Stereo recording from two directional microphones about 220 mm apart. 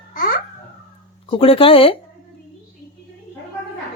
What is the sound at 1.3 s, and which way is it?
Speech, 25° left (ahead or behind).